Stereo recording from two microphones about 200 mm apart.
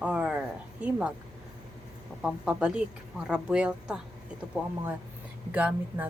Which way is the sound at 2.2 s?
5° right (ahead or behind).